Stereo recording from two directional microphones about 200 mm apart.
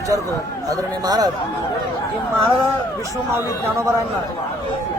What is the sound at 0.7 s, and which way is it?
Speech, 20° right (ahead or behind).